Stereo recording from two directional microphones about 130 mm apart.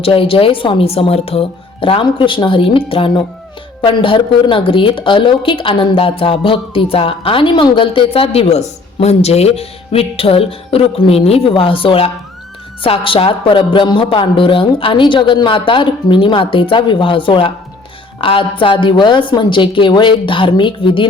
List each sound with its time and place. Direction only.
0.0 s speech: 45° left (ahead or behind)